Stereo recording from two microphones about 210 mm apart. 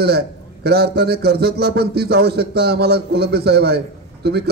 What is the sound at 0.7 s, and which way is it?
A man's voice, 50° right (ahead or behind).